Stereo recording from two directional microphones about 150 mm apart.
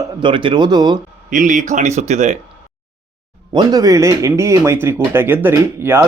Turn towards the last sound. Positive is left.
turn(degrees=-15)  # may be behind; listen again after turning